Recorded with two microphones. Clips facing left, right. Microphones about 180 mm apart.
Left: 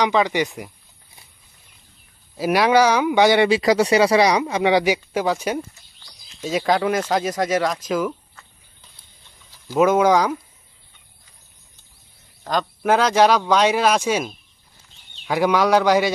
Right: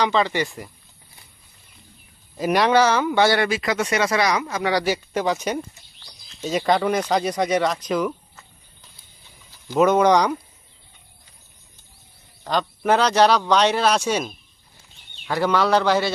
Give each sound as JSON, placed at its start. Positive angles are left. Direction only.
{"t": 0.0, "sound": "speech", "side_deg": 15}
{"t": 2.3, "sound": "speech", "side_deg": 5}
{"t": 3.4, "sound": "speech", "side_deg": 35}
{"t": 4.6, "sound": "speech", "side_deg": 15}
{"t": 9.5, "sound": "speech", "side_deg": 5}
{"t": 12.5, "sound": "speech", "side_deg": 5}